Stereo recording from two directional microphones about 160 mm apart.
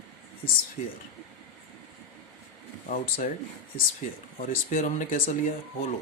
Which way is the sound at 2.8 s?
55° left (ahead or behind).